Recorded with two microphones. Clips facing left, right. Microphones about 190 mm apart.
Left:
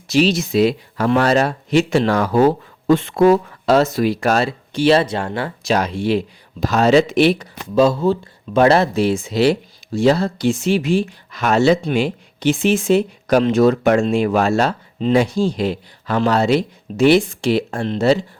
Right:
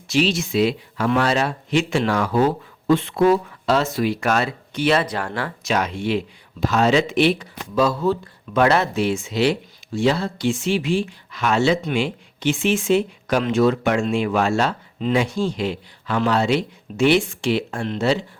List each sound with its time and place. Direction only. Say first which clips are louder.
0.1 s speech: left 4 dB; 40° left (ahead or behind)
7.8 s speech: left 4 dB; 30° left (ahead or behind)